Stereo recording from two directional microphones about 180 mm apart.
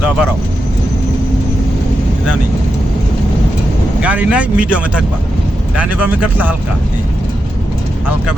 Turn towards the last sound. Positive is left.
turn(degrees=-10)  # may be behind; listen again after turning